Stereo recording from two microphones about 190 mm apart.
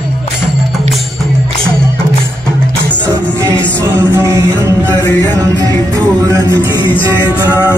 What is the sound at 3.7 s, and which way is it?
Music, 20° right (ahead or behind).